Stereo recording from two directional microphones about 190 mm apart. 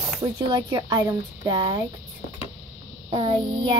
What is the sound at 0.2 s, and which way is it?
Speech, 20° right (ahead or behind).